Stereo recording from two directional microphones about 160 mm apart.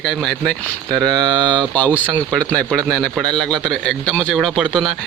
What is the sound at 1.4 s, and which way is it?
Speech, 30° right (ahead or behind).